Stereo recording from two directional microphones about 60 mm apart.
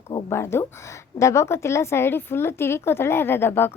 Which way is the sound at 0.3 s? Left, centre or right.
Left.